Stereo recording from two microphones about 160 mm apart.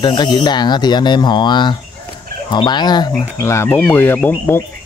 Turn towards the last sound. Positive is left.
turn(degrees=15)  # may be behind; listen again after turning